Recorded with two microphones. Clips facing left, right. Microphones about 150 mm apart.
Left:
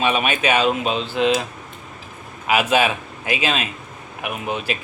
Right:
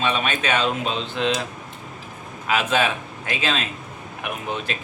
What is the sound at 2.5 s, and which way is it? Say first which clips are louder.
Speech: left 3 dB; 10° left (ahead or behind).